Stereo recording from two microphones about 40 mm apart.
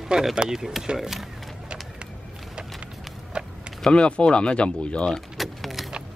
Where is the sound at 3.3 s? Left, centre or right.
Right.